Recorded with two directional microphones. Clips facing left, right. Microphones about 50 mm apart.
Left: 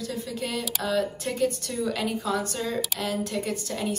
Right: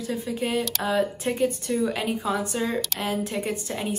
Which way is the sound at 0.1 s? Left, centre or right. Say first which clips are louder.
Right 7 dB; right.